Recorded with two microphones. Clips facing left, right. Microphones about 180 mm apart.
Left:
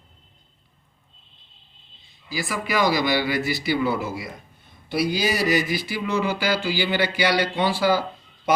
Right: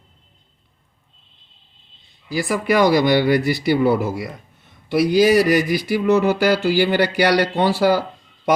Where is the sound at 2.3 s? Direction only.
60° right (ahead or behind).